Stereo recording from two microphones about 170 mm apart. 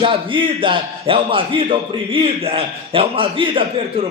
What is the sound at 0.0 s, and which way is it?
A man's voice, 30° right (ahead or behind).